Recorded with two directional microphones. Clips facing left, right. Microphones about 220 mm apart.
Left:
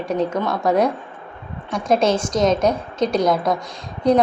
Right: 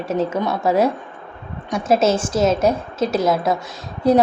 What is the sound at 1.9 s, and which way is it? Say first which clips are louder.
A woman's voice: right 1 dB; 5° right (ahead or behind).